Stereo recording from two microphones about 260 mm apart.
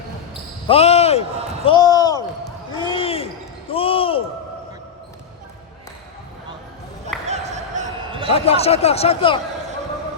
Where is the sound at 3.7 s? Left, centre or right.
Left.